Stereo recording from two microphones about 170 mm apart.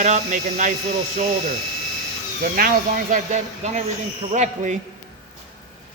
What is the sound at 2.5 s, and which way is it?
Speech, 55° right (ahead or behind).